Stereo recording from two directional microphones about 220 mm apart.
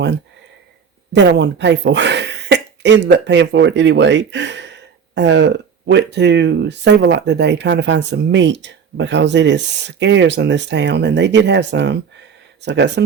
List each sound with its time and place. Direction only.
1.1 s speech: 50° right (ahead or behind)